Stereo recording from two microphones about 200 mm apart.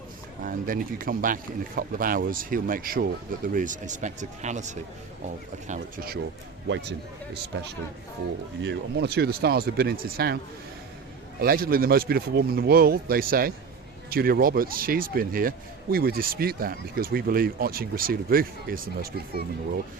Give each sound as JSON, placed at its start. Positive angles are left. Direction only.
{"t": 0.4, "sound": "speech", "side_deg": -45}
{"t": 7.5, "sound": "speech", "side_deg": -65}
{"t": 11.3, "sound": "speech", "side_deg": -50}